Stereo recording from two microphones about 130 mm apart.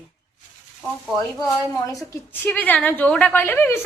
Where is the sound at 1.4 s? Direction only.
25° left (ahead or behind).